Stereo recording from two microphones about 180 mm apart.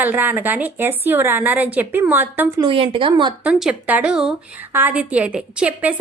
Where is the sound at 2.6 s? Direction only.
30° right (ahead or behind).